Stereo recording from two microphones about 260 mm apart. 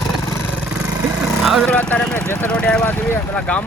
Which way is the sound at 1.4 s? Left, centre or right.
Centre.